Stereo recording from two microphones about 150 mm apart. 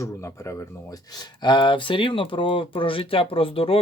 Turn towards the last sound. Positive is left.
turn(degrees=40)  # may be behind; listen again after turning